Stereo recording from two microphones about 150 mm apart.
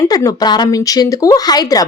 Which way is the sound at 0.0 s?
20° left (ahead or behind).